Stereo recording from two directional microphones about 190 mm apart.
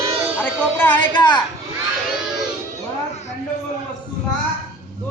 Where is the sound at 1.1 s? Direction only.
25° left (ahead or behind).